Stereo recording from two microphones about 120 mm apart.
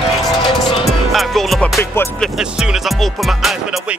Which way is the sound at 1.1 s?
Centre (ahead or behind).